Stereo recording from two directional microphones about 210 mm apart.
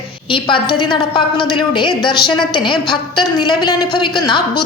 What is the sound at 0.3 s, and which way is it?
A woman's voice, 25° left (ahead or behind).